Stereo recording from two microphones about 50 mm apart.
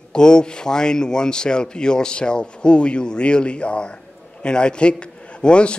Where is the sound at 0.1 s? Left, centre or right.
Centre.